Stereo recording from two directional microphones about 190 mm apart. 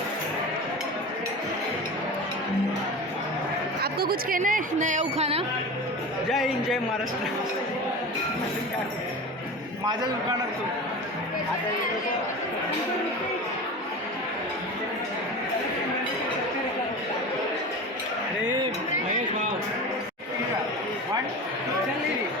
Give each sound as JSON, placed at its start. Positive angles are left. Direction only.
{"t": 3.8, "sound": "speech", "side_deg": -55}
{"t": 6.3, "sound": "a man's voice", "side_deg": 0}